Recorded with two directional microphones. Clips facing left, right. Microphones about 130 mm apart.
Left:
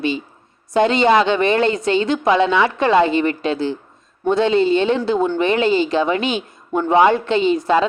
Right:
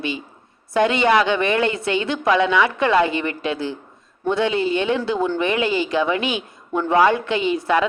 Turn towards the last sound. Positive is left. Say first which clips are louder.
# left 3 dB
turn(degrees=25)  # may be behind; listen again after turning